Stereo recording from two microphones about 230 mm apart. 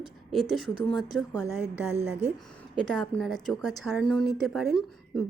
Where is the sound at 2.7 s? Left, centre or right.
Centre.